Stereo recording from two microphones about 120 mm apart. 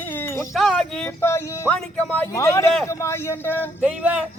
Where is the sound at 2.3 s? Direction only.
25° left (ahead or behind).